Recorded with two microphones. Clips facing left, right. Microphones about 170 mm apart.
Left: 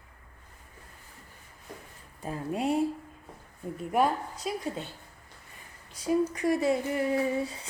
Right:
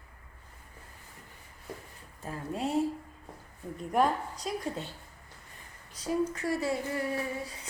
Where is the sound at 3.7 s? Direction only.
5° left (ahead or behind).